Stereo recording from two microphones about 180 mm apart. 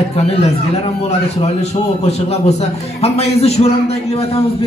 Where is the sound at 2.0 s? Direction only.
35° left (ahead or behind).